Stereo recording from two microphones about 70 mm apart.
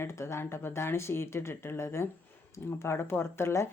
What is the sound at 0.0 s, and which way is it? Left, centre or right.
Speech, left.